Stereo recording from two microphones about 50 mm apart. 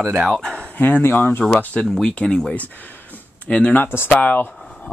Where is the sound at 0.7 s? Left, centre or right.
Left.